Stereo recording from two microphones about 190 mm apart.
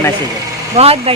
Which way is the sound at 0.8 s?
30° right (ahead or behind).